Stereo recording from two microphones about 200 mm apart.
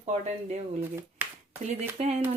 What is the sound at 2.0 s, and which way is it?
Speech, 30° right (ahead or behind).